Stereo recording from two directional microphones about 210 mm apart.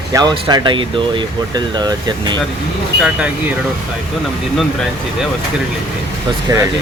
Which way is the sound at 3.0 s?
5° right (ahead or behind).